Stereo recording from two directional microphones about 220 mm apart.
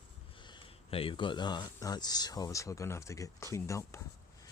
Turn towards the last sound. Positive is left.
turn(degrees=15)  # may be behind; listen again after turning